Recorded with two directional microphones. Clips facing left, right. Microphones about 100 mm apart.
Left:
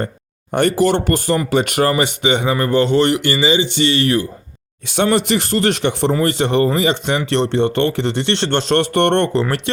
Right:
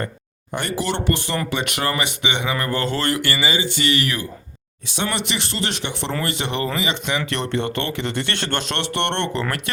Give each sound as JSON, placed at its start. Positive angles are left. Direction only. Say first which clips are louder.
{"t": 0.5, "sound": "a man's voice", "louder": "left 10 dB", "side_deg": 50}
{"t": 2.6, "sound": "a man's voice", "louder": "left 12 dB", "side_deg": 25}